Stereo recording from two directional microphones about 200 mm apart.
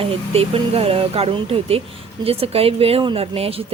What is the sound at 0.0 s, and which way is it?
Speech, 30° right (ahead or behind).